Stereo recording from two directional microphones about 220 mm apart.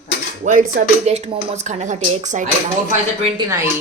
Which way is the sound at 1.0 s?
30° right (ahead or behind).